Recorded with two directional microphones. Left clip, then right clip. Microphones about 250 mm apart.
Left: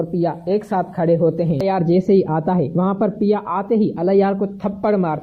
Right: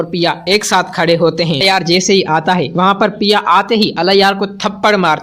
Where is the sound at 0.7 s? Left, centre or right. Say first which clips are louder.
Right 5 dB; right.